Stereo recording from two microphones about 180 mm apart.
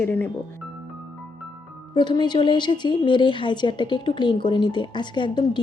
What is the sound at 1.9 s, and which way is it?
A woman's voice, 25° left (ahead or behind).